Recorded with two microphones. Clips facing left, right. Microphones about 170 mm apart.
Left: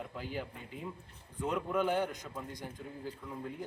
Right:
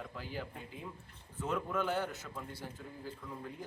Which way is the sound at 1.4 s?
10° left (ahead or behind).